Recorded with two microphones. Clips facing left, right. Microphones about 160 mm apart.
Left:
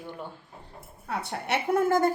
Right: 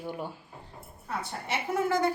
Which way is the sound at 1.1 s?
60° left (ahead or behind).